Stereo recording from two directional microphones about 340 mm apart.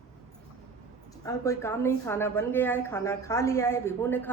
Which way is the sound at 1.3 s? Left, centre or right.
Centre.